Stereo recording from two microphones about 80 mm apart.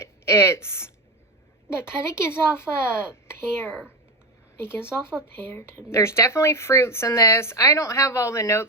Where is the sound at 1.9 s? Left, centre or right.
Left.